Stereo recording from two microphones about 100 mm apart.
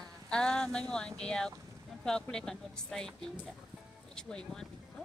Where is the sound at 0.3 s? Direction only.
10° left (ahead or behind).